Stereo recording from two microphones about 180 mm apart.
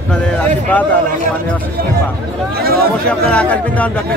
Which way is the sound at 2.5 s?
60° right (ahead or behind).